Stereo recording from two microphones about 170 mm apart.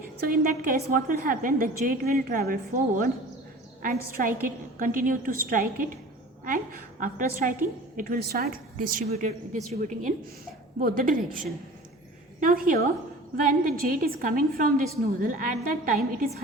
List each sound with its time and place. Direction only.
0.3 s a woman's voice: 55° right (ahead or behind)